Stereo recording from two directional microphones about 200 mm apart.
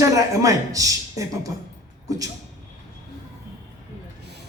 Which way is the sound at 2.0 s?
15° right (ahead or behind).